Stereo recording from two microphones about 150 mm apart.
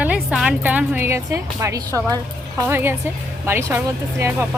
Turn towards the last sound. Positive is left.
turn(degrees=-15)  # may be behind; listen again after turning